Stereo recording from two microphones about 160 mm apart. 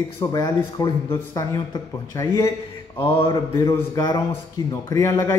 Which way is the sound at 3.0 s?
35° left (ahead or behind).